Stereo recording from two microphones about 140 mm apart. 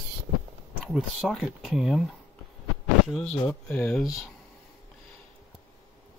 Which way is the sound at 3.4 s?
10° left (ahead or behind).